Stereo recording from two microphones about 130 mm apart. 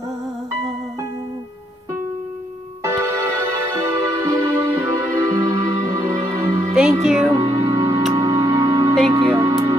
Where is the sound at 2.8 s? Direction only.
20° right (ahead or behind).